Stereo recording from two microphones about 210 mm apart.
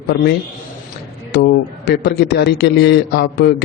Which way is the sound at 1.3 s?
50° left (ahead or behind).